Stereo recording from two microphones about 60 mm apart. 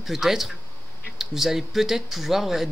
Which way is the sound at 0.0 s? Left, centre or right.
Centre.